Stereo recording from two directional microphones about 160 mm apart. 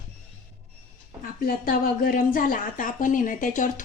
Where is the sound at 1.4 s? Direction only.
65° left (ahead or behind).